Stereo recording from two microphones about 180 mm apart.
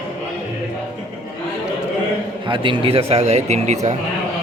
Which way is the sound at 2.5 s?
25° right (ahead or behind).